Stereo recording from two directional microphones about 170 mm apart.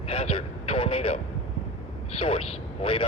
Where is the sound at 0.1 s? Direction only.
35° left (ahead or behind).